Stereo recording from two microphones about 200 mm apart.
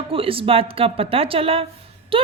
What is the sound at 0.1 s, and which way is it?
A woman's voice, 25° right (ahead or behind).